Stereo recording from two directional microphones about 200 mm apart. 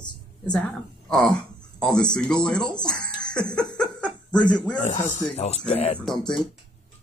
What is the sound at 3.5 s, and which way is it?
Laughter, 5° left (ahead or behind).